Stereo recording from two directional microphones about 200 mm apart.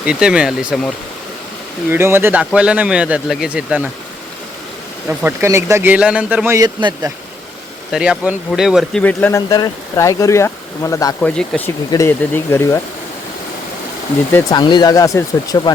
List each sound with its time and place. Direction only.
0.0 s speech: 5° right (ahead or behind)
1.9 s a man's voice: 10° right (ahead or behind)
5.0 s a man's voice: 10° right (ahead or behind)
7.9 s speech: 5° right (ahead or behind); by 12.8 s 15° left (ahead or behind)
14.3 s speech: 20° left (ahead or behind)